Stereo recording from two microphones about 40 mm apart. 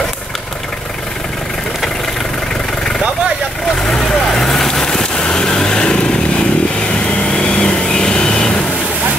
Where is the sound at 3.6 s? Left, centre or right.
Centre.